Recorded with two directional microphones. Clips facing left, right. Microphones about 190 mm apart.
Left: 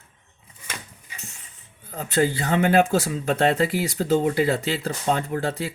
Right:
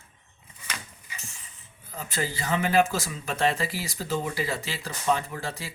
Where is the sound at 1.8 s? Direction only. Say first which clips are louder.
Left 10 dB; 65° left (ahead or behind).